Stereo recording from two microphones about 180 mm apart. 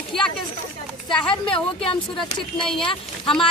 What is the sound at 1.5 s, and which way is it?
Speech, 30° left (ahead or behind).